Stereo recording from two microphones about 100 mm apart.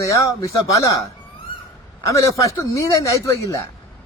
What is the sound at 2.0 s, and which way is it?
A man's voice, 30° left (ahead or behind).